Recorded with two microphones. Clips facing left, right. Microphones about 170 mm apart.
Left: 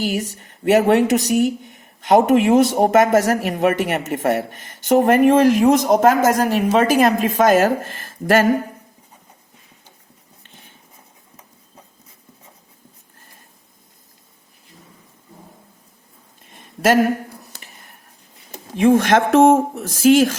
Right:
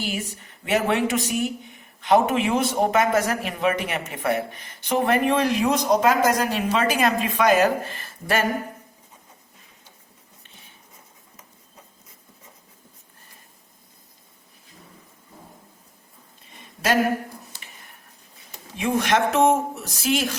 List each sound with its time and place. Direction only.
0.0 s a woman's voice: 40° left (ahead or behind)
1.6 s a sound: 45° left (ahead or behind)
2.5 s speech: 45° left (ahead or behind)
18.8 s speech: 50° left (ahead or behind)